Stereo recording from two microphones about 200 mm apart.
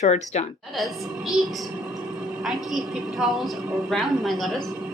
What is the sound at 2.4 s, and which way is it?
A woman's voice, centre (ahead or behind).